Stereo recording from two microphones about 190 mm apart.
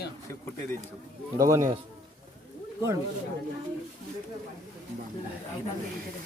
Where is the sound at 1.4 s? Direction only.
15° right (ahead or behind).